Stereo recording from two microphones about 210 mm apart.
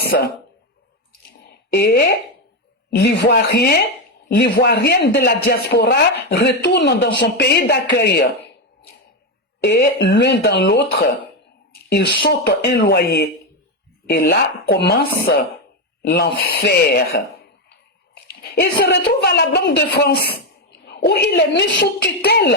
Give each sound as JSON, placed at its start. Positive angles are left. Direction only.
{"t": 1.7, "sound": "a man's voice", "side_deg": 50}
{"t": 9.6, "sound": "a man's voice", "side_deg": 50}
{"t": 11.7, "sound": "a sound", "side_deg": 50}
{"t": 12.5, "sound": "a man's voice", "side_deg": 55}